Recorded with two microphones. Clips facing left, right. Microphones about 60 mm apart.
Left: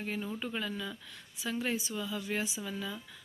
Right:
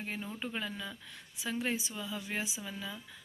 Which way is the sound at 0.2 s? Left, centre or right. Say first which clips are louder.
Left 2 dB; centre.